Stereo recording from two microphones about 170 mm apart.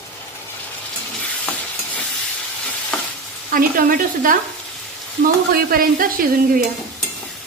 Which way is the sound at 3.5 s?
55° right (ahead or behind).